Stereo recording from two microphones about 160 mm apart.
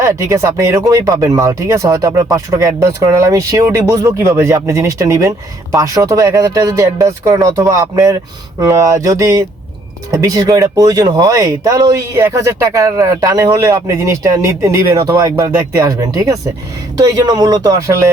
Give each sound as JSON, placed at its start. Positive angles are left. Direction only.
{"t": 0.0, "sound": "speech", "side_deg": -20}